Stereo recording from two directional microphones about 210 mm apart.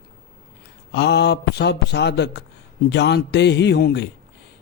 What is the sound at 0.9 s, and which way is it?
A man's voice, 55° left (ahead or behind).